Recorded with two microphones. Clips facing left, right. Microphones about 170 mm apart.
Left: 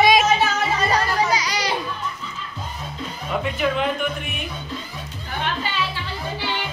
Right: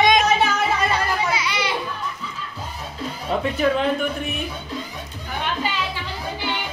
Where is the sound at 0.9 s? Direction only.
40° left (ahead or behind).